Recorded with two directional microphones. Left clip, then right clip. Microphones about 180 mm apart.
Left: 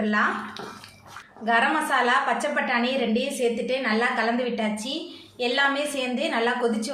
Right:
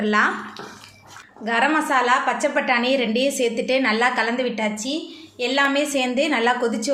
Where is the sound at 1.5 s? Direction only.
35° right (ahead or behind).